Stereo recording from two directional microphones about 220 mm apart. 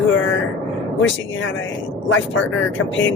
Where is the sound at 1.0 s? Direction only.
60° left (ahead or behind).